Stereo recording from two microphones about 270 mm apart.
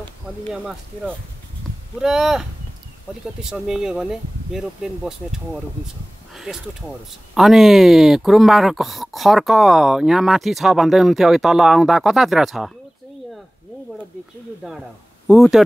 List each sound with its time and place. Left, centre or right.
0.5 s speech: centre
6.3 s a sound: centre
7.3 s speech: centre
15.2 s speech: centre